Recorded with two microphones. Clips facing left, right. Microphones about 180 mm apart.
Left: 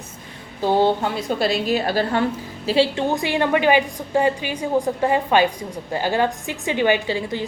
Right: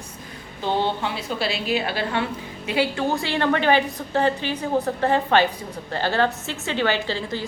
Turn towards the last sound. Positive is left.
turn(degrees=15)  # may be behind; listen again after turning